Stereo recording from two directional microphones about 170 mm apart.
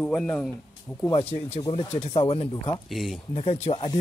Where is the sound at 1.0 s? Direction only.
20° left (ahead or behind).